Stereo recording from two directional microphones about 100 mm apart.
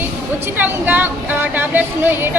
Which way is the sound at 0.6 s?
20° right (ahead or behind).